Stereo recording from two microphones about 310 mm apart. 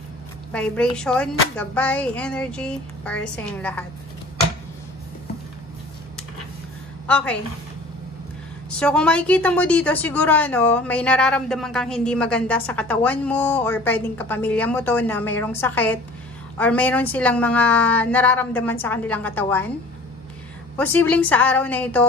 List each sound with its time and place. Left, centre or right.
0.5 s speech: centre
7.1 s a woman's voice: centre
8.7 s speech: centre
20.7 s speech: centre